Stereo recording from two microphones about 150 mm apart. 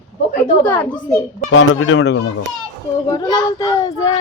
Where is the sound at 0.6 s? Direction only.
10° left (ahead or behind).